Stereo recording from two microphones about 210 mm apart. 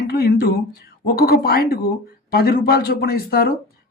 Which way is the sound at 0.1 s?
50° left (ahead or behind).